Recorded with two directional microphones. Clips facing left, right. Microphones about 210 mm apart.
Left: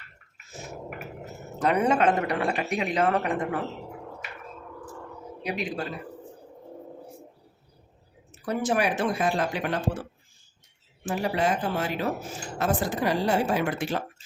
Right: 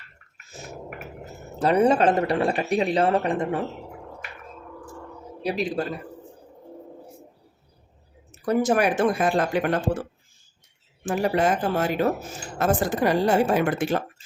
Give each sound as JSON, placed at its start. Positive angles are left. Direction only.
{"t": 1.5, "sound": "speech", "side_deg": -30}
{"t": 5.4, "sound": "speech", "side_deg": -35}
{"t": 8.4, "sound": "speech", "side_deg": -45}
{"t": 11.0, "sound": "speech", "side_deg": -50}